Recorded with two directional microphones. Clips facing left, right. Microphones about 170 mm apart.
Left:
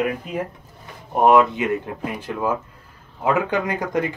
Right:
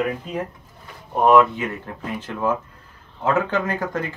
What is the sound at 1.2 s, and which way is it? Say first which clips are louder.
Speech: even; 20° left (ahead or behind).